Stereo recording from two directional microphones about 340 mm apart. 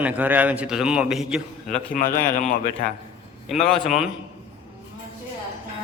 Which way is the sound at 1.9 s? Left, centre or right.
Left.